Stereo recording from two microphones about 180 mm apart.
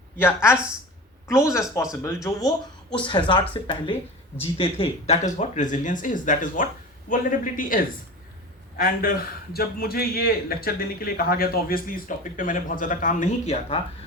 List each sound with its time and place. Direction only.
1.3 s a man's voice: 15° left (ahead or behind); by 13.7 s 40° left (ahead or behind)